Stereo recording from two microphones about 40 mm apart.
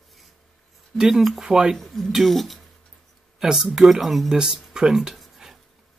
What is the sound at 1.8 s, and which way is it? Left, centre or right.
Speech, centre.